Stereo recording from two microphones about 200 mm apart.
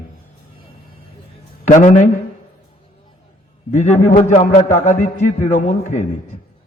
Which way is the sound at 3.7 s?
35° left (ahead or behind).